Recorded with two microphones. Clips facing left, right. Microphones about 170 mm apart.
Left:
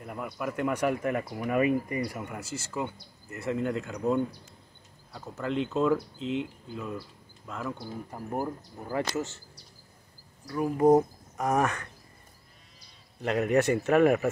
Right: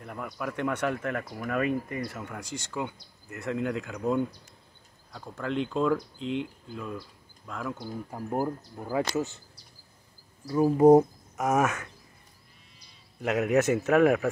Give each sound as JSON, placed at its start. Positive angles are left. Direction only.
{"t": 0.0, "sound": "speech", "side_deg": 5}
{"t": 8.1, "sound": "speech", "side_deg": -10}
{"t": 10.5, "sound": "speech", "side_deg": -20}
{"t": 11.3, "sound": "speech", "side_deg": -5}
{"t": 13.2, "sound": "speech", "side_deg": -5}